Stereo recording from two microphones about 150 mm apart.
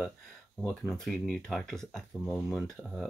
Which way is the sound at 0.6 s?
Centre (ahead or behind).